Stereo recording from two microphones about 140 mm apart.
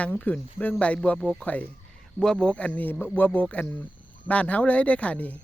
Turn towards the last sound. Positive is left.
turn(degrees=10)  # may be behind; listen again after turning